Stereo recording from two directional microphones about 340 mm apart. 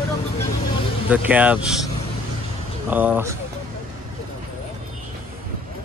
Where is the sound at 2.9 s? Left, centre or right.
Centre.